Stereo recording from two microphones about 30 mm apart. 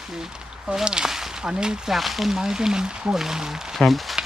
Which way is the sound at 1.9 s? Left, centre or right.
Centre.